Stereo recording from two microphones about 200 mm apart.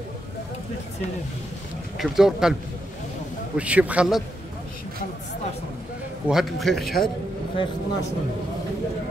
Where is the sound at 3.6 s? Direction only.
5° right (ahead or behind).